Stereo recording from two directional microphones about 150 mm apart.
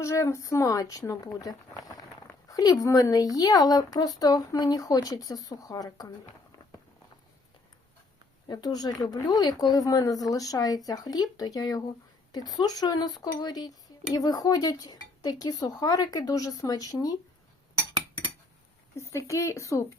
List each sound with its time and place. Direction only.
0.0 s speech: 20° left (ahead or behind)
8.4 s speech: 25° left (ahead or behind)
18.9 s speech: 20° left (ahead or behind)